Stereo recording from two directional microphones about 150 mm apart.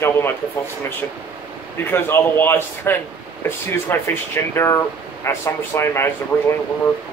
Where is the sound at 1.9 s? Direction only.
15° left (ahead or behind).